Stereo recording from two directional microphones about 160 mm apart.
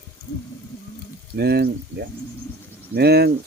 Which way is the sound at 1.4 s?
90° right.